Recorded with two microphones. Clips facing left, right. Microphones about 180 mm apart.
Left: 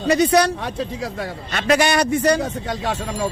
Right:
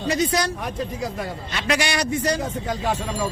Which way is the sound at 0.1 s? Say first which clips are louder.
Left 7 dB; 65° left (ahead or behind).